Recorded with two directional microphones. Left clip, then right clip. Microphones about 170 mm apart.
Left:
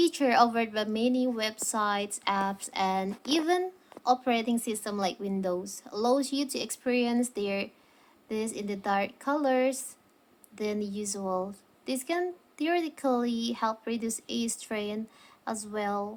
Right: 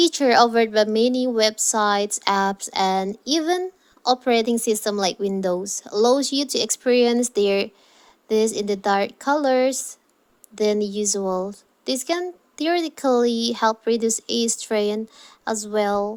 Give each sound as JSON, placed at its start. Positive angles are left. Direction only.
{"t": 0.0, "sound": "a woman's voice", "side_deg": -35}